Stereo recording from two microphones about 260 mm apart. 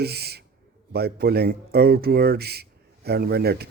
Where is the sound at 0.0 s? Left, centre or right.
Right.